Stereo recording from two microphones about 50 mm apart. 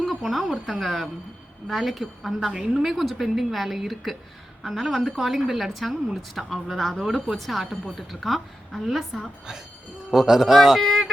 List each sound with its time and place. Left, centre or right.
0.0 s a woman's voice: centre
2.5 s a woman's voice: centre
2.9 s a woman's voice: centre
10.1 s a woman's voice: centre